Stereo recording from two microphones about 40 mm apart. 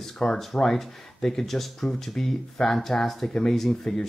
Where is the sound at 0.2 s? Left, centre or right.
Left.